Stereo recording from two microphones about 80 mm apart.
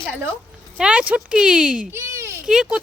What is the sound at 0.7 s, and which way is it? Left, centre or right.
Speech, centre.